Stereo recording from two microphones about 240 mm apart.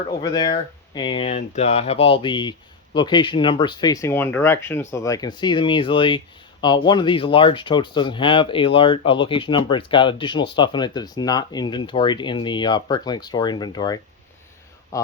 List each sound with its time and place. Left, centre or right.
0.1 s speech: centre